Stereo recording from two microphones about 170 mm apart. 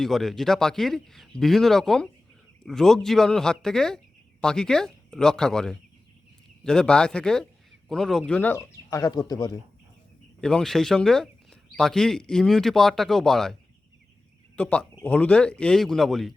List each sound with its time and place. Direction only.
0.0 s speech: centre (ahead or behind); by 9.6 s 25° left (ahead or behind)
10.4 s speech: 5° left (ahead or behind)